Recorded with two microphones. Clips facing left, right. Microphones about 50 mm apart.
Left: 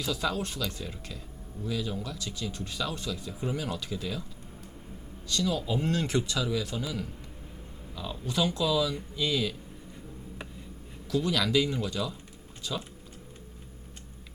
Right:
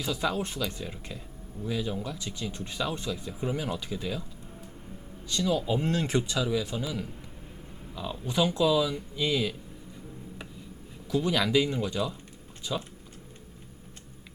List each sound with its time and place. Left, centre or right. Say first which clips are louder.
0.0 s speech: right 1 dB; centre
5.3 s speech: right 2 dB; centre
11.1 s speech: right 1 dB; centre